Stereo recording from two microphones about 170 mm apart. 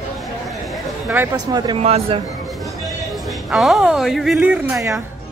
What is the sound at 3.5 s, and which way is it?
A woman's voice, centre (ahead or behind).